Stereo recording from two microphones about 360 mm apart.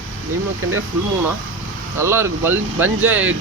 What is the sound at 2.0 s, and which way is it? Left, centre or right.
Speech, centre.